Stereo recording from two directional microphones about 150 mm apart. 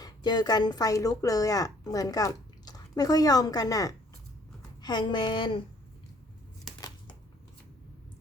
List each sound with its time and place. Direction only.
0.0 s a woman's voice: 30° left (ahead or behind)